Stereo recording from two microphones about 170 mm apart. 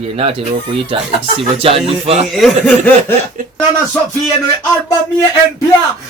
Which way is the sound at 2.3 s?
5° left (ahead or behind).